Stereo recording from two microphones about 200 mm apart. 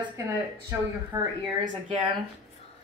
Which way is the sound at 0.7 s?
10° right (ahead or behind).